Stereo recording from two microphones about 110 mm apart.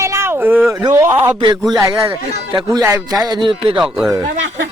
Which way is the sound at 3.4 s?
50° right (ahead or behind).